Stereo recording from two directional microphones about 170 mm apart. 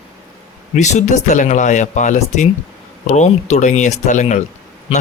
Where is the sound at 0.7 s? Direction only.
45° left (ahead or behind).